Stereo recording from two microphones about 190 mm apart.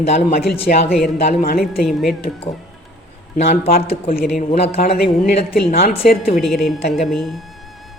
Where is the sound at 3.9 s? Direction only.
50° left (ahead or behind).